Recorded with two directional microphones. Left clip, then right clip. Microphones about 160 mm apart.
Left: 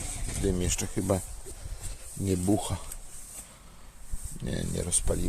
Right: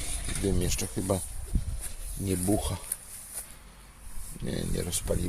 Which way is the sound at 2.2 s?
10° left (ahead or behind).